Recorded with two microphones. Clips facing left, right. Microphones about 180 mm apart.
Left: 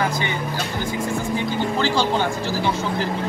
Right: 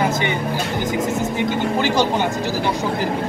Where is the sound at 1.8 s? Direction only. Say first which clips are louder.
Right 2 dB; 15° right (ahead or behind).